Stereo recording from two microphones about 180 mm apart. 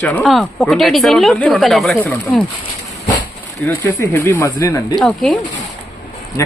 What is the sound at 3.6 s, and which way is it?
Speech, 10° left (ahead or behind).